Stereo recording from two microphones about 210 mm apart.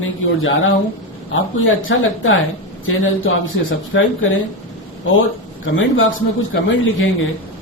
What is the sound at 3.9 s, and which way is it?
Speech, 60° left (ahead or behind).